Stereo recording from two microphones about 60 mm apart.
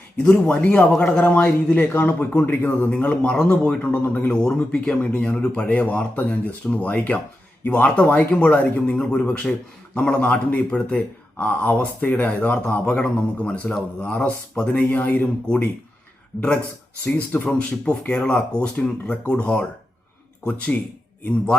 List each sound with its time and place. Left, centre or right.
0.2 s a man's voice: centre
4.0 s a man's voice: left
4.3 s a man's voice: centre
8.9 s a man's voice: centre
17.1 s speech: left